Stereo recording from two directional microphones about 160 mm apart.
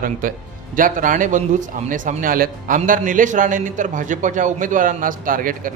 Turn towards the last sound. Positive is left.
turn(degrees=-60)  # may be behind; listen again after turning